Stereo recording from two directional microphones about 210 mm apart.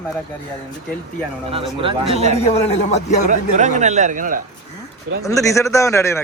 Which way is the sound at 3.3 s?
35° right (ahead or behind).